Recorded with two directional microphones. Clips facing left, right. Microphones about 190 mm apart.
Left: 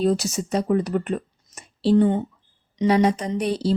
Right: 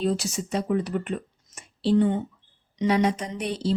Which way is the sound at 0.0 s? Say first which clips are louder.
Left 4 dB; 40° left (ahead or behind).